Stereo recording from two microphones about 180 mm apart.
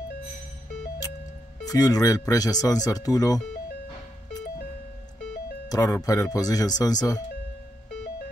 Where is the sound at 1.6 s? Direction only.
20° left (ahead or behind).